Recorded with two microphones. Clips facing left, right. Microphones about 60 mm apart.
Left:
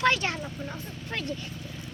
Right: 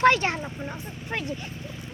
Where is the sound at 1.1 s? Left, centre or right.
Centre.